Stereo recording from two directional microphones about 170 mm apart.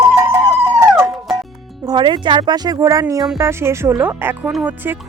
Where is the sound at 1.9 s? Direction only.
25° right (ahead or behind).